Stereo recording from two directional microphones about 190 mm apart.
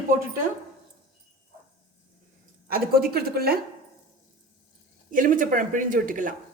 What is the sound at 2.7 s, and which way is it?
Speech, 50° right (ahead or behind).